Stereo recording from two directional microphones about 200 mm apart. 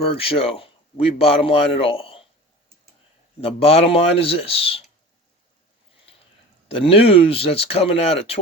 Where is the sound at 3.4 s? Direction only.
30° left (ahead or behind).